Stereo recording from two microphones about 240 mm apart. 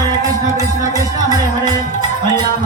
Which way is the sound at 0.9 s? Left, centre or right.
Centre.